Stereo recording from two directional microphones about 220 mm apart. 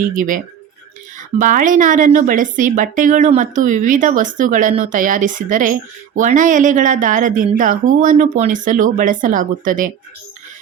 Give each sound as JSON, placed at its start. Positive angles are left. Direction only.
{"t": 0.2, "sound": "speech", "side_deg": -35}